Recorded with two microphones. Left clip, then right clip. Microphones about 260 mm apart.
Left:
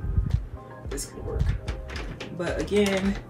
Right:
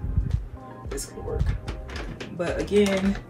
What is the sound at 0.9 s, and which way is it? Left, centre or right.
Speech, centre.